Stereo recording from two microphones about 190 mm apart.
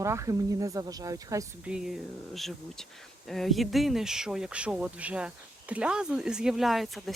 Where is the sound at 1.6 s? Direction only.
5° right (ahead or behind).